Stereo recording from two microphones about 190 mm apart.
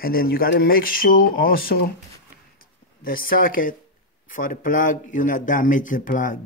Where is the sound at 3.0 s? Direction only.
50° left (ahead or behind).